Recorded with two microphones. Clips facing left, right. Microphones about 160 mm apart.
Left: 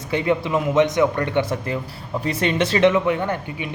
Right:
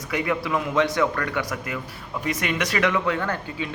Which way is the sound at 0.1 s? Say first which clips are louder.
Left 4 dB; 25° left (ahead or behind).